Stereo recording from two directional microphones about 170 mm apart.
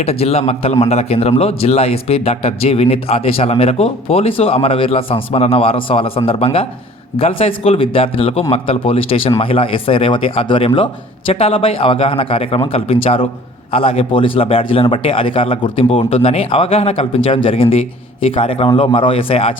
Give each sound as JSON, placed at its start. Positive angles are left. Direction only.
{"t": 0.0, "sound": "a man's voice", "side_deg": 40}